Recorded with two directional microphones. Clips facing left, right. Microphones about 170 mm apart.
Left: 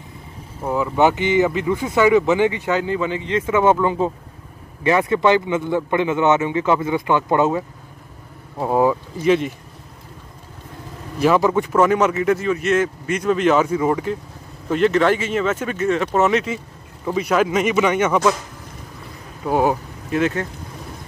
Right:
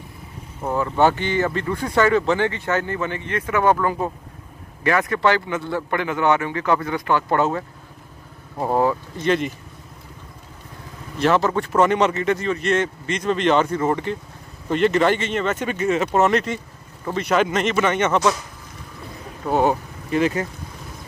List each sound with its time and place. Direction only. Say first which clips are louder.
0.6 s a man's voice: left 1 dB; 5° left (ahead or behind)
8.5 s speech: left 2 dB; 5° left (ahead or behind)
11.1 s speech: left 3 dB; 10° left (ahead or behind)
19.4 s speech: left 1 dB; 10° left (ahead or behind)